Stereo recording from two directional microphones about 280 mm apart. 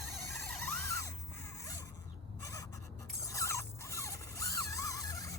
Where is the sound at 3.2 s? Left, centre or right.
Centre.